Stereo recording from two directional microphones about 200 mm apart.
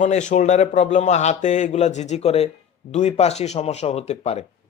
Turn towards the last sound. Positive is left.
turn(degrees=35)  # may be behind; listen again after turning